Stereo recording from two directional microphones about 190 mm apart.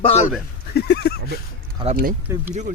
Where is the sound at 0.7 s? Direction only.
60° left (ahead or behind).